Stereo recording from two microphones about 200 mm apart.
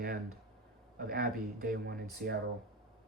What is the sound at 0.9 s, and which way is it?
Speech, 45° right (ahead or behind).